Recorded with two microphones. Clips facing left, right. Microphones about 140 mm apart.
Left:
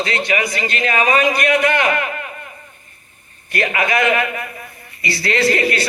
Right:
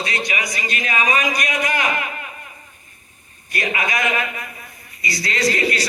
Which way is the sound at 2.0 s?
40° left (ahead or behind).